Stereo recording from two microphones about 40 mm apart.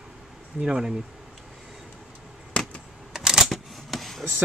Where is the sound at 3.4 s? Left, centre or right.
Centre.